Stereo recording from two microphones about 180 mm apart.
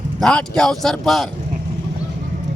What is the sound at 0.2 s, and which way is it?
Speech, 5° left (ahead or behind).